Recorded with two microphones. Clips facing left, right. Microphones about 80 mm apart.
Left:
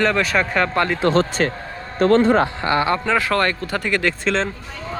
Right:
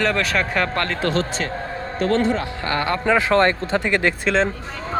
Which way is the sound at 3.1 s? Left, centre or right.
Right.